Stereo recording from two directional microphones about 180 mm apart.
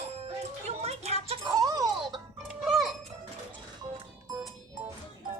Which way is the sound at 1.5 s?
20° right (ahead or behind).